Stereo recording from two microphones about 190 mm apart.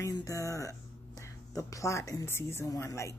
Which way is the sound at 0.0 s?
15° left (ahead or behind).